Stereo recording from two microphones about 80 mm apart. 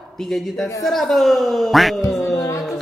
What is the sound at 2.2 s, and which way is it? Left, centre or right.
Music, left.